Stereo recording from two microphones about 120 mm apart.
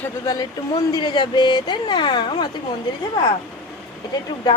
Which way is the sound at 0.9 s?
35° left (ahead or behind).